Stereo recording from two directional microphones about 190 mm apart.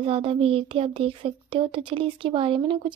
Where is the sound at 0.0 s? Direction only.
30° right (ahead or behind).